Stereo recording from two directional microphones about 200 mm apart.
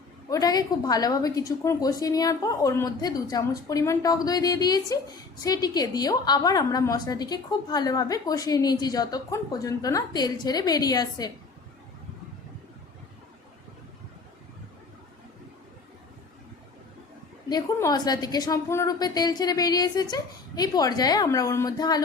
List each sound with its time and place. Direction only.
0.3 s a woman's voice: 20° left (ahead or behind)
17.5 s a woman's voice: 20° left (ahead or behind)